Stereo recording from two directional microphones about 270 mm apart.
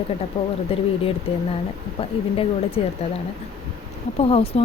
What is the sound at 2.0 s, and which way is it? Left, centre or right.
Speech, left.